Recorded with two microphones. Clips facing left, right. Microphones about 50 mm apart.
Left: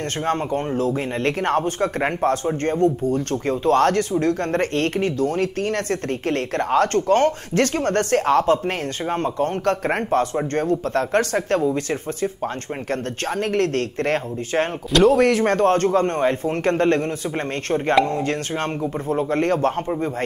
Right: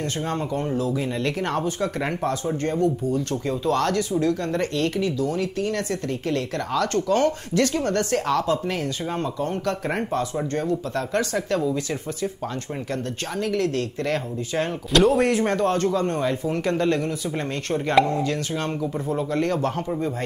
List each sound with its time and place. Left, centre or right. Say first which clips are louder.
0.2 s speech: left 6 dB; left